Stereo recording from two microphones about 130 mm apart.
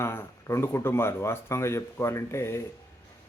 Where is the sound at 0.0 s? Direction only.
20° left (ahead or behind).